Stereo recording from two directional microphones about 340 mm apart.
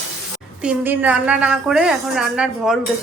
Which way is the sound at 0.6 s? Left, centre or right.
Centre.